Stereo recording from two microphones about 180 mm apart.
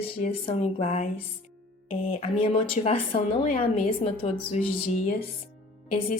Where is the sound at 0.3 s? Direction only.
35° left (ahead or behind).